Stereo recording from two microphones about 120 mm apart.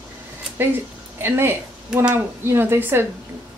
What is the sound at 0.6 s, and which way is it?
Speech, 20° right (ahead or behind).